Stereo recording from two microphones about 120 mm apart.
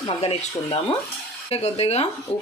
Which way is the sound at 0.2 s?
50° left (ahead or behind).